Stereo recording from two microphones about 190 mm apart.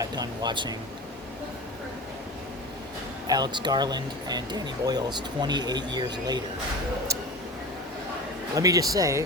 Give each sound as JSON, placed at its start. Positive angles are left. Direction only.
{"t": 0.0, "sound": "speech", "side_deg": -20}
{"t": 3.2, "sound": "speech", "side_deg": -20}
{"t": 8.5, "sound": "speech", "side_deg": -20}